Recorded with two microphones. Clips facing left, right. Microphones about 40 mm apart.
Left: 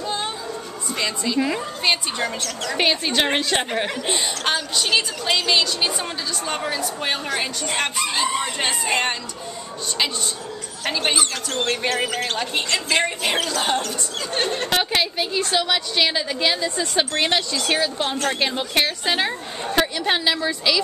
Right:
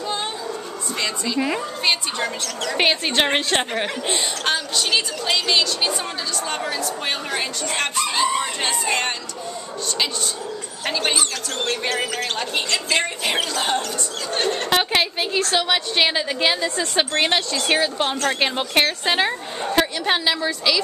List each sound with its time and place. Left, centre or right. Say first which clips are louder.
0.0 s music: even; centre
0.9 s a woman's voice: left 1 dB; centre
1.4 s a woman's voice: right 2 dB; centre
1.9 s a woman's voice: left 1 dB; centre
10.9 s a woman's voice: even; centre
14.8 s a woman's voice: right 1 dB; centre
16.6 s a woman's voice: right 1 dB; centre
17.7 s a woman's voice: right 3 dB; centre
18.1 s a woman's voice: right 1 dB; centre
18.4 s a woman's voice: right 3 dB; centre